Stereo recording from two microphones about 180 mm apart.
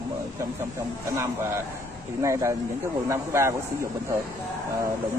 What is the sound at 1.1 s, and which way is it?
Speech, 15° right (ahead or behind).